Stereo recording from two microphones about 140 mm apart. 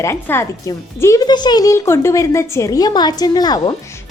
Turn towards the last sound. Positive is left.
turn(degrees=30)  # may be behind; listen again after turning